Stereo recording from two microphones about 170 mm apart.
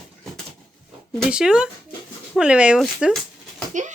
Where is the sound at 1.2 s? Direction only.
5° right (ahead or behind).